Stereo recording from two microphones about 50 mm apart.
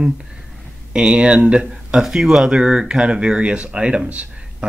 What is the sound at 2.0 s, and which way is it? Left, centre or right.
Speech, centre.